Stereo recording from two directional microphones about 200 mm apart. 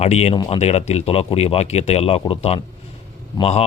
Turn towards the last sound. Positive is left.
turn(degrees=30)  # may be behind; listen again after turning